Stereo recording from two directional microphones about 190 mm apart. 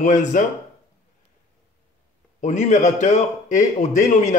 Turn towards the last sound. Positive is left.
turn(degrees=40)  # may be behind; listen again after turning